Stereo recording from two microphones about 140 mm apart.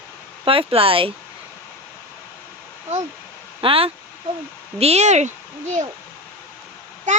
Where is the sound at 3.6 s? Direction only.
40° right (ahead or behind).